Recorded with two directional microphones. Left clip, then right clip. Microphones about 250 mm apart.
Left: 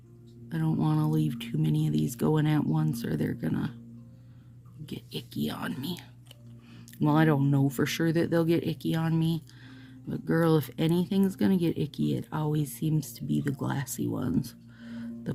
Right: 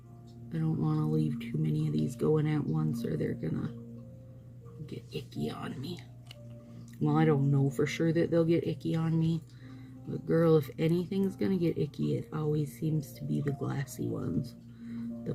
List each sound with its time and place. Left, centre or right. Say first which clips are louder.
0.4 s speech: left 4 dB; left
4.9 s speech: left 3 dB; left
7.0 s speech: left 3 dB; left
14.8 s music: even; left